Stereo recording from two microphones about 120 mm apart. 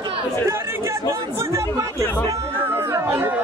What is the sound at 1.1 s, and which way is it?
Speech, 25° right (ahead or behind).